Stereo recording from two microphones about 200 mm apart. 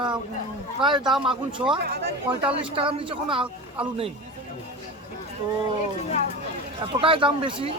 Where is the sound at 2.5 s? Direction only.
25° right (ahead or behind).